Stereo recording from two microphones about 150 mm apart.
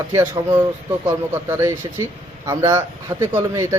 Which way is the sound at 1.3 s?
15° right (ahead or behind).